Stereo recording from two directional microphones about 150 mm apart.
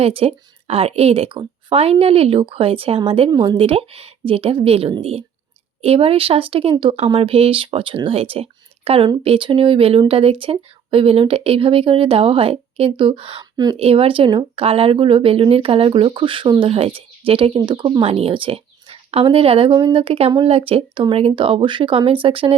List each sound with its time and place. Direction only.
0.0 s speech: 40° right (ahead or behind)
13.7 s speech: 40° right (ahead or behind)